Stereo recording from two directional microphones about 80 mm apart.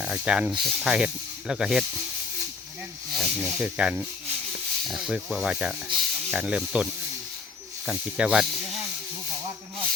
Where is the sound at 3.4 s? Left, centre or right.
Centre.